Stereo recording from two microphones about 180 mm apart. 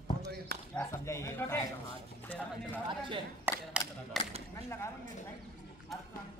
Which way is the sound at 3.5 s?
10° right (ahead or behind).